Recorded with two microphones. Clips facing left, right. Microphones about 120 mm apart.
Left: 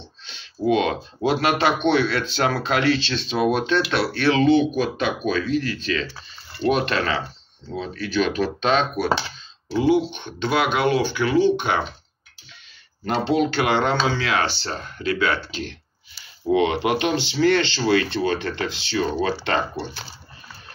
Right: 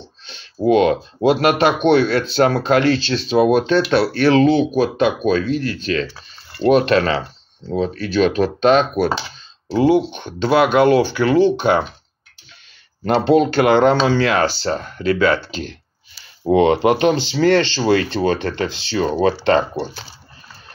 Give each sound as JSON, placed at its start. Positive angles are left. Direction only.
{"t": 0.7, "sound": "speech", "side_deg": -45}
{"t": 13.1, "sound": "speech", "side_deg": -40}